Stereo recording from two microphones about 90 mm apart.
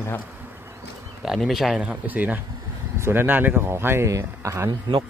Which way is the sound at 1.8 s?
15° right (ahead or behind).